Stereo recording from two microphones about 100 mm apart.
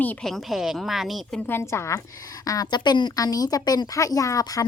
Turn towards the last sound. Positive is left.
turn(degrees=35)  # may be behind; listen again after turning